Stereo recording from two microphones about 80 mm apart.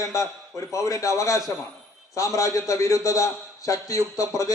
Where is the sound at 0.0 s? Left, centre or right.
Left.